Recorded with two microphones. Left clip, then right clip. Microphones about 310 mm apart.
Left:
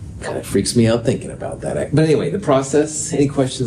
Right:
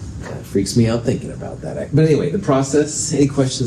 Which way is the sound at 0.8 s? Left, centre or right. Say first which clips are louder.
Left 3 dB; left.